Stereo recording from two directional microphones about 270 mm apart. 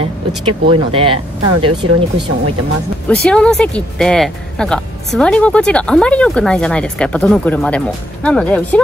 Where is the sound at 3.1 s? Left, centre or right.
Centre.